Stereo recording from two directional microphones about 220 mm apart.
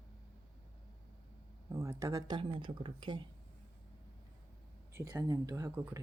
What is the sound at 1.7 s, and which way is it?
Speech, 15° right (ahead or behind).